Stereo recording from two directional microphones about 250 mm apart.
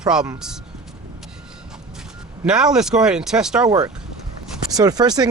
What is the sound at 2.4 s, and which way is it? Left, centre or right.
Speech, centre.